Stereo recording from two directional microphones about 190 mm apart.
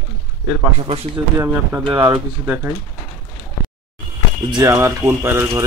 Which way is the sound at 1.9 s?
20° right (ahead or behind).